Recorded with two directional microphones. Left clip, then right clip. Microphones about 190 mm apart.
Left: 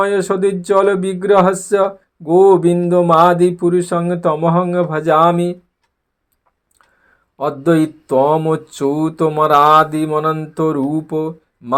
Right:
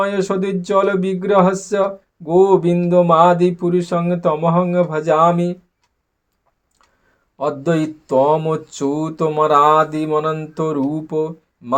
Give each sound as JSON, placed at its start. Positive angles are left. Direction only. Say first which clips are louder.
{"t": 0.0, "sound": "speech", "louder": "left 4 dB", "side_deg": 45}
{"t": 7.3, "sound": "speech", "louder": "left 4 dB", "side_deg": 45}